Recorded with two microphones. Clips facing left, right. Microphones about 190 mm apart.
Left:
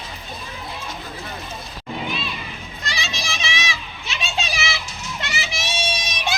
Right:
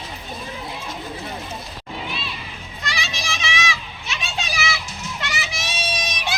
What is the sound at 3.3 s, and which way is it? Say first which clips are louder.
Children playing: right 4 dB; 30° left (ahead or behind).